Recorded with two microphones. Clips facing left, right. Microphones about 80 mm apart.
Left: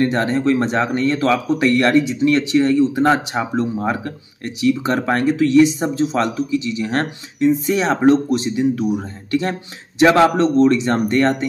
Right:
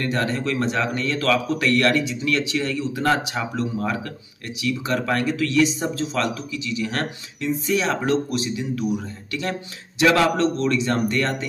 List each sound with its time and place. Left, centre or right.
0.0 s speech: left